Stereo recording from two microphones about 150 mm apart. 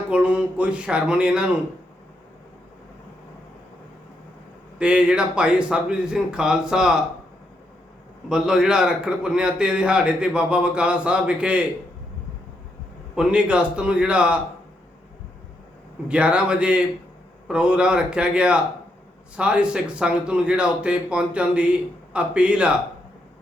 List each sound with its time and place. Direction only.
0.1 s a man's voice: 10° right (ahead or behind)
4.8 s speech: 5° right (ahead or behind)
8.3 s a man's voice: 5° right (ahead or behind)
13.1 s a man's voice: 5° right (ahead or behind)
16.0 s a man's voice: 5° right (ahead or behind)